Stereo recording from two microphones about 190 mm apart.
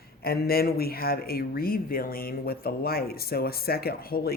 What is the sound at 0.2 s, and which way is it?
Speech, 55° left (ahead or behind).